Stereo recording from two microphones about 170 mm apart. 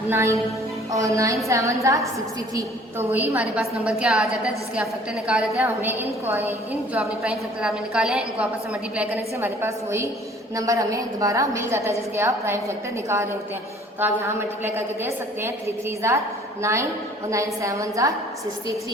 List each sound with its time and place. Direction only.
0.1 s a woman's voice: 15° right (ahead or behind)
17.3 s a woman's voice: 20° right (ahead or behind)